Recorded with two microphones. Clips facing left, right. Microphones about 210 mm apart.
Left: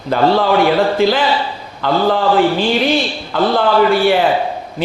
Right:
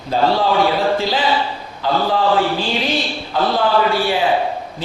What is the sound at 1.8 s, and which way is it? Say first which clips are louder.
Speech: left 4 dB; 60° left (ahead or behind).